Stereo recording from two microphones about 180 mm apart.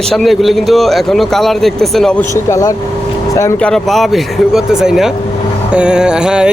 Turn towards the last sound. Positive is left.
turn(degrees=-5)  # may be behind; listen again after turning